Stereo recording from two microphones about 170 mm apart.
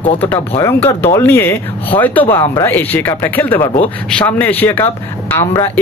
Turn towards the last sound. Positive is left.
turn(degrees=15)  # may be behind; listen again after turning